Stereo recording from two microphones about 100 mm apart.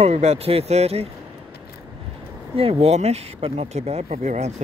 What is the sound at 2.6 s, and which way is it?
Speech, 75° right (ahead or behind).